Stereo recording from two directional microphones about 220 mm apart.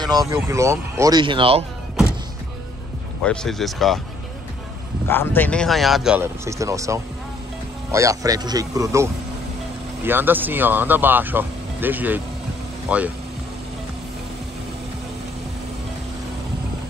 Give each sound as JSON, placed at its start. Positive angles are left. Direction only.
{"t": 0.0, "sound": "speech", "side_deg": -15}
{"t": 3.2, "sound": "speech", "side_deg": 0}
{"t": 5.0, "sound": "speech", "side_deg": 10}